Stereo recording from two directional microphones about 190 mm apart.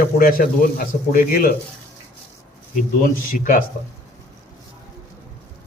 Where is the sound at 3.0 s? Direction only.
45° left (ahead or behind).